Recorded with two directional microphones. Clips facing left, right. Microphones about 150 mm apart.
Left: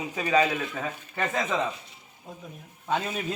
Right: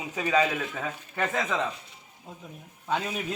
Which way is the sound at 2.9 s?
Centre (ahead or behind).